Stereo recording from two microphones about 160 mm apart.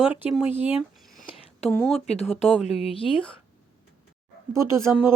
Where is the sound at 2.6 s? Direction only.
40° left (ahead or behind).